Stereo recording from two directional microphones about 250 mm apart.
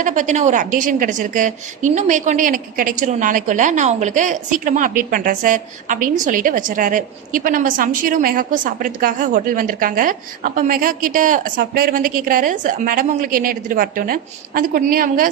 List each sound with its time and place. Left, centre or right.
0.0 s a woman's voice: right